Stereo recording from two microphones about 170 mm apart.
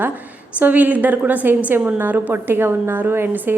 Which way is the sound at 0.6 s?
10° right (ahead or behind).